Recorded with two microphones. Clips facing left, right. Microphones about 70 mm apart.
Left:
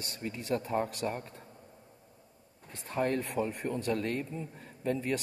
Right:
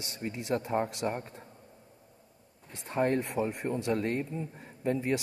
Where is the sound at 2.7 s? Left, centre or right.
Right.